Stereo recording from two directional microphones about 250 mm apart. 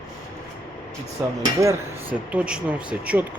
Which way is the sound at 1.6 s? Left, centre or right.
Centre.